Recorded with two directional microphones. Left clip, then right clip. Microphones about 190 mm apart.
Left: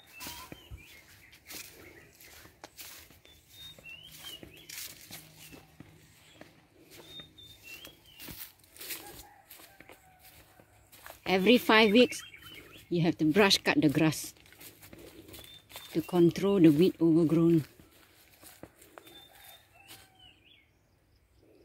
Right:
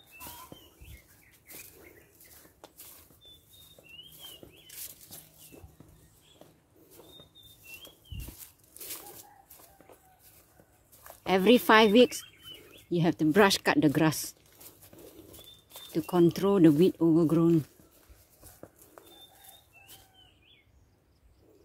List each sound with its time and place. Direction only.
0.5 s bird flight: 5° left (ahead or behind)
4.4 s a sound: 15° left (ahead or behind)
11.1 s speech: 10° right (ahead or behind)
15.3 s speech: 5° right (ahead or behind)